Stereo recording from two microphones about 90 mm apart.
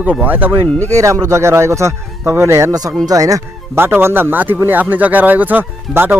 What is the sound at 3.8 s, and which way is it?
Speech, 25° right (ahead or behind).